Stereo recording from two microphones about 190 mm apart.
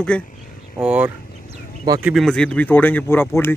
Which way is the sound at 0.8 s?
5° right (ahead or behind).